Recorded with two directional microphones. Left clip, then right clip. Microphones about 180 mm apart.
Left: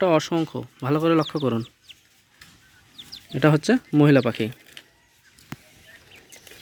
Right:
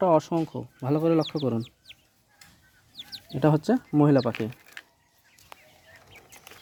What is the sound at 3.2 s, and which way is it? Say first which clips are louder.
Speech: left 4 dB; 5° left (ahead or behind).